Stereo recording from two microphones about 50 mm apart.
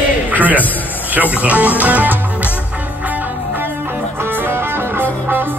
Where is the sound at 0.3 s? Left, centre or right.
Right.